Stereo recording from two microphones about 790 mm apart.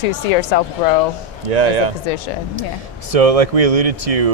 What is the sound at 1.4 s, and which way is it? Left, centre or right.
Speech, right.